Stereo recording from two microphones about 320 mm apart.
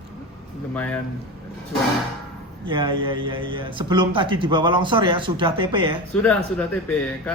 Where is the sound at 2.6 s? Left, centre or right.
Centre.